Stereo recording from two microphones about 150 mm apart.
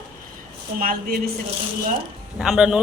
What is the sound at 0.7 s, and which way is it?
Speech, 75° right (ahead or behind).